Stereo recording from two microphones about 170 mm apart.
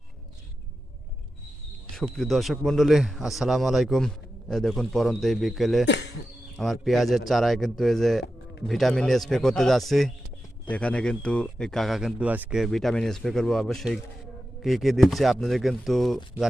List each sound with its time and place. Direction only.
2.0 s a man's voice: centre (ahead or behind)
5.8 s speech: 90° left
6.6 s a man's voice: centre (ahead or behind)